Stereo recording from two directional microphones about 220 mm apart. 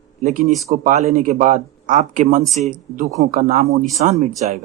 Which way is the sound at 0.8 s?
30° right (ahead or behind).